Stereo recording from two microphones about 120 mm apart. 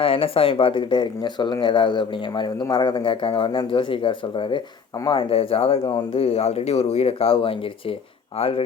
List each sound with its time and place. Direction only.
0.0 s speech: 50° left (ahead or behind)